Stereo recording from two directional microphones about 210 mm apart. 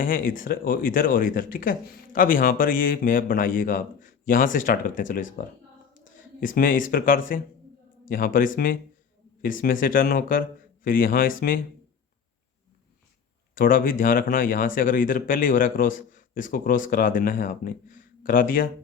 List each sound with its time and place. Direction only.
0.0 s speech: 40° left (ahead or behind)
13.6 s speech: 40° left (ahead or behind)